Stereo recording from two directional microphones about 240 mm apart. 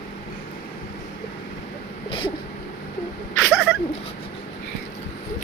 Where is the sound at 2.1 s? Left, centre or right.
Left.